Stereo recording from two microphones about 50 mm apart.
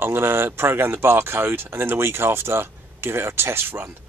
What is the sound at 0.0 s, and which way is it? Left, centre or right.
Speech, right.